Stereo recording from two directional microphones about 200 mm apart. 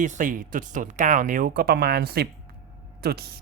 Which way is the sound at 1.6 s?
50° right (ahead or behind).